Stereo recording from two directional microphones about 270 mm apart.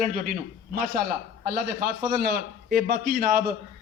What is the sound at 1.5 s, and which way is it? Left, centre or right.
A man's voice, right.